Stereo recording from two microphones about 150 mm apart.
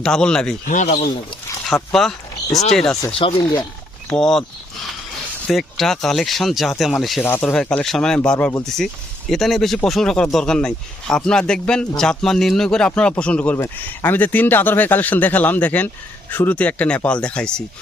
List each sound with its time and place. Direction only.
0.0 s speech: 5° left (ahead or behind)
0.7 s speech: 55° left (ahead or behind)
1.6 s speech: centre (ahead or behind)
3.1 s speech: 35° left (ahead or behind)
4.1 s speech: 5° left (ahead or behind)
5.5 s speech: centre (ahead or behind)
7.2 s speech: 15° left (ahead or behind)